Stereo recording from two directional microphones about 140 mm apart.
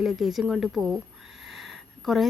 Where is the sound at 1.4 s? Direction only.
Centre (ahead or behind).